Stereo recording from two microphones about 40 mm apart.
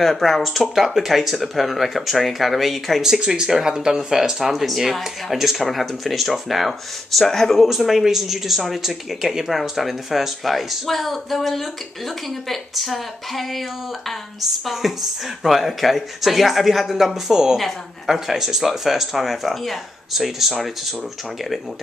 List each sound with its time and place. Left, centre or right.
0.0 s speech: centre
0.7 s speech: centre
3.3 s speech: centre